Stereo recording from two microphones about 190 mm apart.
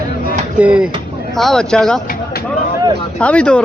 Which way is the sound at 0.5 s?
5° right (ahead or behind).